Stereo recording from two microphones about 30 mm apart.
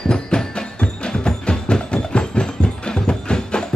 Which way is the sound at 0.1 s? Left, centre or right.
Left.